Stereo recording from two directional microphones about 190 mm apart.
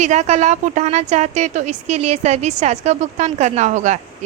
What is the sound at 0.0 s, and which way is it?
A woman's voice, 35° right (ahead or behind).